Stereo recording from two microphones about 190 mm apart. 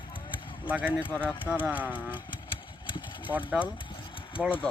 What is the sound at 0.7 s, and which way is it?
Speech, 5° right (ahead or behind).